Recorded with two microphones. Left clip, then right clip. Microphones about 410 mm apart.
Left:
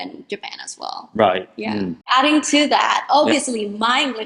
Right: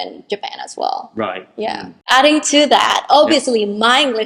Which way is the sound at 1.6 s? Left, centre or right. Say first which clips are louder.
Right 3 dB; right.